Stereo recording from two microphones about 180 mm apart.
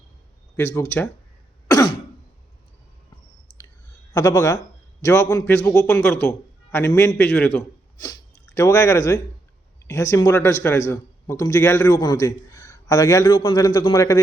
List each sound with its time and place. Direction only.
0.5 s a man's voice: 15° left (ahead or behind)
1.6 s throat clearing: 20° left (ahead or behind)
4.1 s a man's voice: 20° left (ahead or behind)